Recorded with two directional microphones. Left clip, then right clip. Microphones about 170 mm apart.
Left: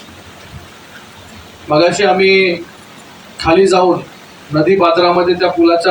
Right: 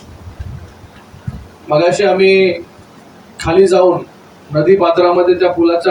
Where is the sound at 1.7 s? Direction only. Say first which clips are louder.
Even; 40° left (ahead or behind).